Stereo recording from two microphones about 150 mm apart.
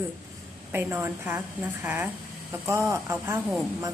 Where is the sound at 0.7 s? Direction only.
15° right (ahead or behind).